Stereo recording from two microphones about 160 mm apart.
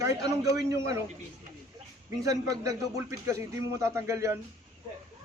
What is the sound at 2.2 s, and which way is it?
A man's voice, 20° right (ahead or behind).